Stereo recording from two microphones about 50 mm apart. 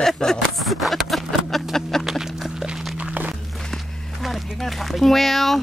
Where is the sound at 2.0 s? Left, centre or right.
Centre.